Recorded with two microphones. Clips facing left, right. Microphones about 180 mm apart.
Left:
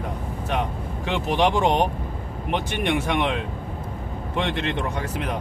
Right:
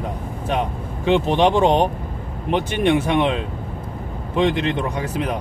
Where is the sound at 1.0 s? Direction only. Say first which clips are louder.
Right 6 dB; 20° right (ahead or behind).